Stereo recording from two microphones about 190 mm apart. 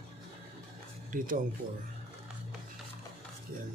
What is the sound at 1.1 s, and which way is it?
Speech, 45° right (ahead or behind).